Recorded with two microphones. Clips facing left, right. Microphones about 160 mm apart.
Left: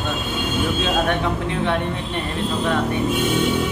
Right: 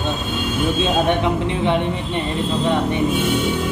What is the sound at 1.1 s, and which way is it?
Speech, 20° right (ahead or behind).